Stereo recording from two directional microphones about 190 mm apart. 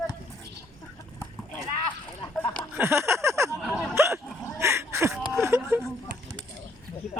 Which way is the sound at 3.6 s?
Centre (ahead or behind).